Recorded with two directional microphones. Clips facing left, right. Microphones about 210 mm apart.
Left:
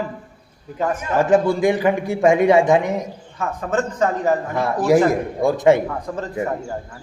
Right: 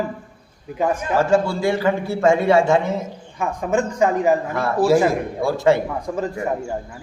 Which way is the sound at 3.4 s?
15° right (ahead or behind).